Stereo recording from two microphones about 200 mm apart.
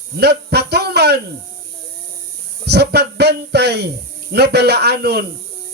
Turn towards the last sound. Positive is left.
turn(degrees=-55)  # may be behind; listen again after turning